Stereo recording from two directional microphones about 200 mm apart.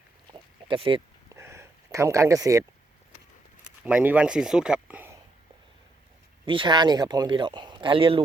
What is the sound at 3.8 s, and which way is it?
Speech, 5° right (ahead or behind).